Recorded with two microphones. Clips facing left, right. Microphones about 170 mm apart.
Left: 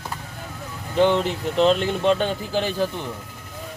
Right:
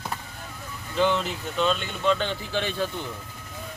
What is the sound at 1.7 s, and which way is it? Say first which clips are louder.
Speech: left 6 dB; 75° left (ahead or behind).